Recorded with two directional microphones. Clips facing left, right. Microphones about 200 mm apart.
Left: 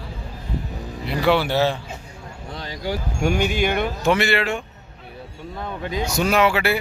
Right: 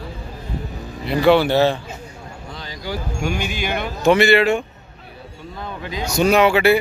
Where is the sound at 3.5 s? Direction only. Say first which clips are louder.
Left 3 dB; 55° left (ahead or behind).